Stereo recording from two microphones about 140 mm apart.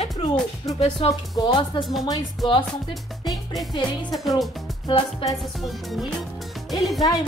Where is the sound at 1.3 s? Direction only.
30° left (ahead or behind).